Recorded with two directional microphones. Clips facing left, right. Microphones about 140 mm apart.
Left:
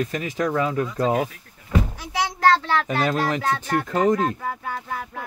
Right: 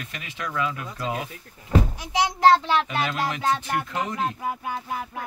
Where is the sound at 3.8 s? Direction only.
45° left (ahead or behind).